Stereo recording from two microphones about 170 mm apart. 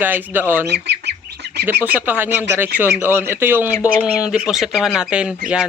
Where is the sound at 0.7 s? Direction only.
80° right.